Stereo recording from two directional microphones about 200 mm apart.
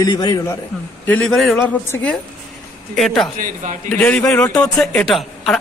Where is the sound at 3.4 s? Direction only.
40° right (ahead or behind).